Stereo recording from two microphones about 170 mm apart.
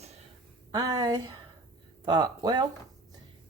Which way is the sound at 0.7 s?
20° right (ahead or behind).